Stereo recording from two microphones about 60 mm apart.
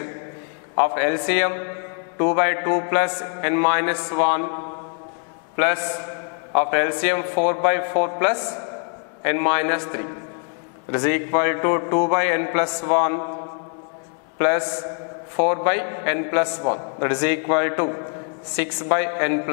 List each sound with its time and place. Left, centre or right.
0.7 s a man's voice: centre
5.6 s a man's voice: centre
14.4 s a man's voice: centre